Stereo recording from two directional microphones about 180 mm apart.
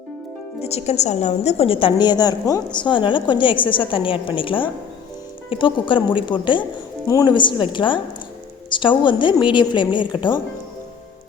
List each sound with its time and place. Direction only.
0.6 s a woman's voice: 35° left (ahead or behind)